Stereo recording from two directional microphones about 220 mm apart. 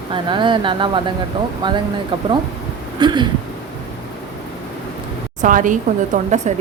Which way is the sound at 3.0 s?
20° right (ahead or behind).